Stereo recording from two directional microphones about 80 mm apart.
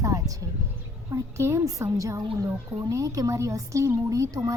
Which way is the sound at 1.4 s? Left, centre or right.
Right.